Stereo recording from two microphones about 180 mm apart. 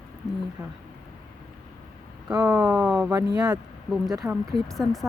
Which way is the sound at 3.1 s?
20° right (ahead or behind).